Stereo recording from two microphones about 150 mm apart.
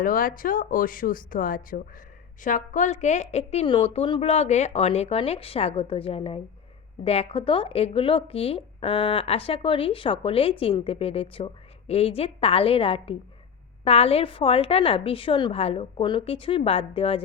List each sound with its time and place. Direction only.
0.0 s a woman's voice: 70° left (ahead or behind); by 17.2 s 40° left (ahead or behind)